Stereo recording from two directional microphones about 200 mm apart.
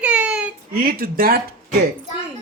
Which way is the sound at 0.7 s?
45° right (ahead or behind).